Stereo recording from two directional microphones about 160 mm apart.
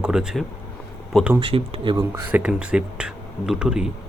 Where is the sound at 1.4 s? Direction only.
35° right (ahead or behind).